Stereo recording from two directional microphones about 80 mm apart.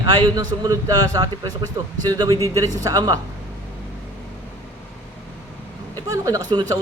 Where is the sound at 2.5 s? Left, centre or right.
Right.